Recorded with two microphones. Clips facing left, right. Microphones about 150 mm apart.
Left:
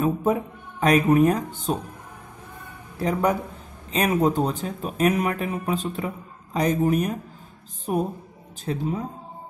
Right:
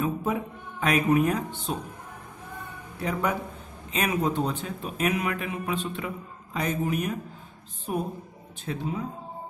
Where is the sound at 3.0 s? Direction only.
35° left (ahead or behind).